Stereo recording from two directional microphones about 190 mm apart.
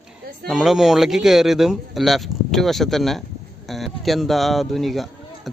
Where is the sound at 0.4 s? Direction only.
Centre (ahead or behind).